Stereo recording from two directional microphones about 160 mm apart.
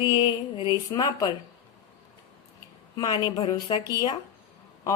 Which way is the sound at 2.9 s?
25° left (ahead or behind).